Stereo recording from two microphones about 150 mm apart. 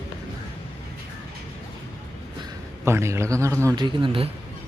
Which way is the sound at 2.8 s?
20° right (ahead or behind).